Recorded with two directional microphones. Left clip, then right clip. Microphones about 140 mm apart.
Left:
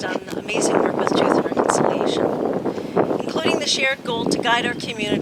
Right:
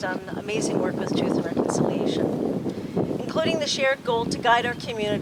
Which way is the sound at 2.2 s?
45° left (ahead or behind).